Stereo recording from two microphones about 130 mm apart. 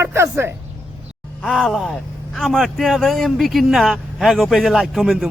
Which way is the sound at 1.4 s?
5° left (ahead or behind).